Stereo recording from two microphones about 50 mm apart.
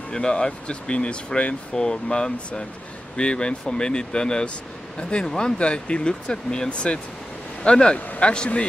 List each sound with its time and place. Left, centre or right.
0.1 s speech: centre